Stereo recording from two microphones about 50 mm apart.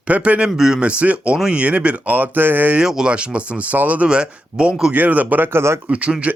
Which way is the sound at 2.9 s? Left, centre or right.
Centre.